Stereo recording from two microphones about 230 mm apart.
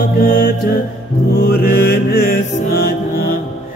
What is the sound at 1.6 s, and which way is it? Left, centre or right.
Mantra, left.